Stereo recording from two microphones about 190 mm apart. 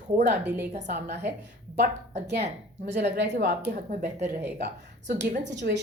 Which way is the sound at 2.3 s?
60° right (ahead or behind).